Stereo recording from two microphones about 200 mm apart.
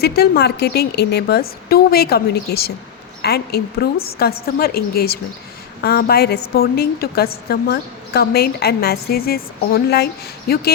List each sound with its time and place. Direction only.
0.0 s a woman's voice: 50° left (ahead or behind)